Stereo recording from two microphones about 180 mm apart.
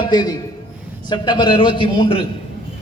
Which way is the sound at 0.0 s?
25° left (ahead or behind).